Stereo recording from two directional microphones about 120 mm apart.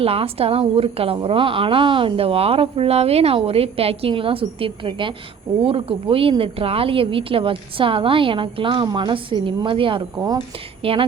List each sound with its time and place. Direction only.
0.0 s a woman's voice: 55° right (ahead or behind)